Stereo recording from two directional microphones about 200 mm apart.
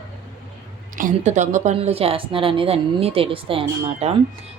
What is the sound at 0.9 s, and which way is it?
A woman's voice, 40° right (ahead or behind).